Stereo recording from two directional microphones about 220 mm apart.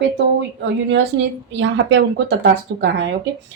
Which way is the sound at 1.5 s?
55° right (ahead or behind).